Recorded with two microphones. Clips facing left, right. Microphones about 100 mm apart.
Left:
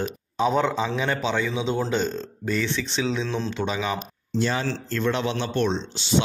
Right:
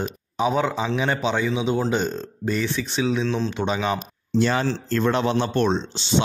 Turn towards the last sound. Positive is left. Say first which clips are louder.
# even
turn(degrees=-25)  # may be behind; listen again after turning